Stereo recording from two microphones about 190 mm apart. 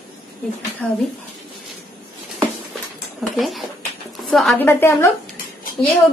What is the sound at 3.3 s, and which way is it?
A woman's voice, centre (ahead or behind).